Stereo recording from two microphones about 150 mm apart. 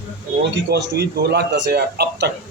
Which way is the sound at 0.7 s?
90° right.